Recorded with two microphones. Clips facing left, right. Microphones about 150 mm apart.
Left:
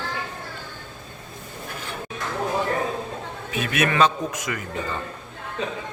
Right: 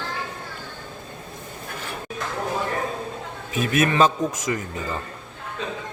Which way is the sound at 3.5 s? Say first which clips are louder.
Right 2 dB; 40° right (ahead or behind).